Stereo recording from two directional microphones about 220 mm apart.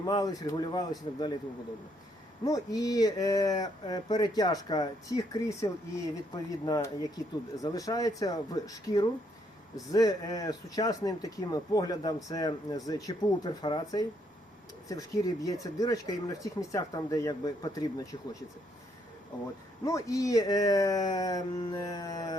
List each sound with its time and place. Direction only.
0.0 s speech: 15° left (ahead or behind)
2.4 s speech: 15° left (ahead or behind)
19.8 s speech: 15° left (ahead or behind)